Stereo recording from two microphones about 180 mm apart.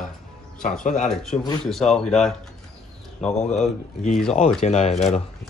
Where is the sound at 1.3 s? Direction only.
35° left (ahead or behind).